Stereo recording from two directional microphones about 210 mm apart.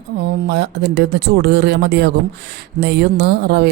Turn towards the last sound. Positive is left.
turn(degrees=-50)  # may be behind; listen again after turning